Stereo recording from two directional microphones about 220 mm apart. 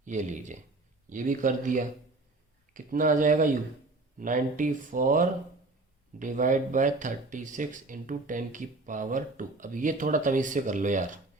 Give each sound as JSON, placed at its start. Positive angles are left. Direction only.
{"t": 0.0, "sound": "speech", "side_deg": -35}